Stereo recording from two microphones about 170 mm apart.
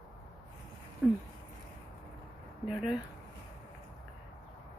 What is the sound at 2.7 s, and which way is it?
Speech, 25° left (ahead or behind).